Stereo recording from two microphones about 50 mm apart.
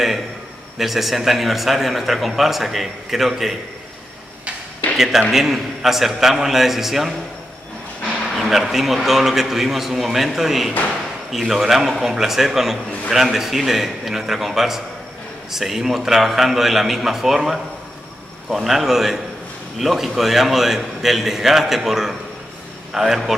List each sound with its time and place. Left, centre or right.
0.7 s a man's voice: centre
4.9 s a man's voice: centre
8.4 s a man's voice: centre